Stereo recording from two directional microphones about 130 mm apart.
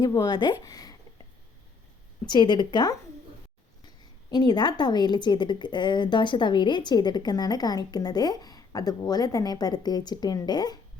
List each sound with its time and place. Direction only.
0.0 s a woman's voice: 30° left (ahead or behind)
2.2 s a woman's voice: 35° left (ahead or behind)